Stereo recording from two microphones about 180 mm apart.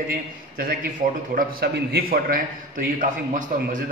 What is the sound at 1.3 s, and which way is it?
A man's voice, 60° right (ahead or behind).